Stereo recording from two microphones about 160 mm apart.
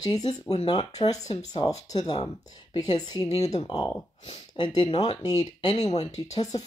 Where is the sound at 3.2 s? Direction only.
45° left (ahead or behind).